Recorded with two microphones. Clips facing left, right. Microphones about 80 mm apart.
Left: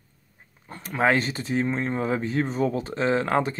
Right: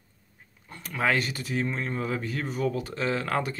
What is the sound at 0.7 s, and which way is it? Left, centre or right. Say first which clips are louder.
Speech: left 4 dB; left.